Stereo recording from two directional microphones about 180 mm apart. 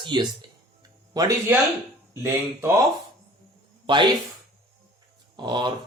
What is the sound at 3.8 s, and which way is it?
Speech, 25° right (ahead or behind).